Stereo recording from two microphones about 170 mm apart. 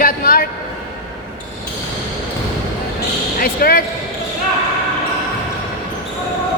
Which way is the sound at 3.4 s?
60° left (ahead or behind).